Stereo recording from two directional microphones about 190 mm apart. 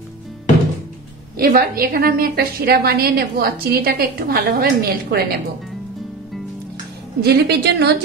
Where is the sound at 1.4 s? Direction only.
50° right (ahead or behind).